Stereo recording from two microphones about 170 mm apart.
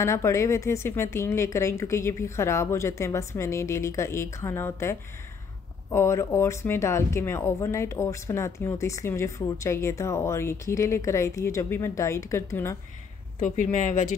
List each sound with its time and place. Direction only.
0.0 s speech: 15° left (ahead or behind)
13.4 s speech: 45° left (ahead or behind)